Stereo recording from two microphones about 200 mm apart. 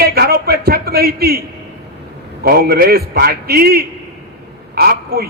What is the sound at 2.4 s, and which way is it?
A man's voice, 50° right (ahead or behind).